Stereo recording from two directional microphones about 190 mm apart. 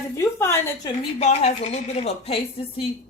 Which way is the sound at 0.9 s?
30° left (ahead or behind).